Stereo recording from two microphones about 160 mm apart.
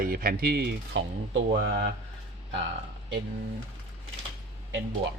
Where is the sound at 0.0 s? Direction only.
65° right (ahead or behind).